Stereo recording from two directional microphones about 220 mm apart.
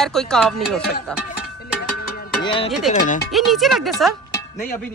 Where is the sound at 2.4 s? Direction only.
25° left (ahead or behind).